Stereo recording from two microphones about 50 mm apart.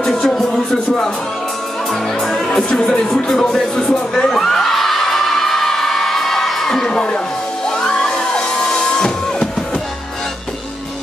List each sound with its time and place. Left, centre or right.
0.0 s music: centre
6.9 s speech: centre
7.6 s music: centre